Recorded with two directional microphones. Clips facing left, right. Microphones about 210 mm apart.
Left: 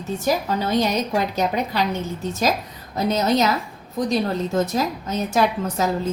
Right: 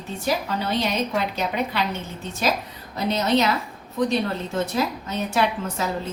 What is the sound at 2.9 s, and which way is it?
Speech, 40° left (ahead or behind).